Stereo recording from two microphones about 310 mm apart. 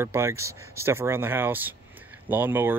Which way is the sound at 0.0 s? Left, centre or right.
Centre.